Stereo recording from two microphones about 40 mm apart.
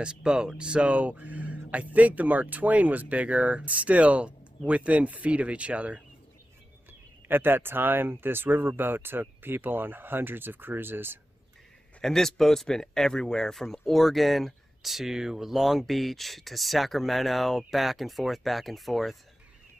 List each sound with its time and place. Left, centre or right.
0.0 s speech: right
6.9 s speech: right
12.0 s a man's voice: centre